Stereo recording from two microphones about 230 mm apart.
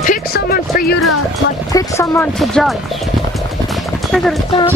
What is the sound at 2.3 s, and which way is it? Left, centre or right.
Speech, centre.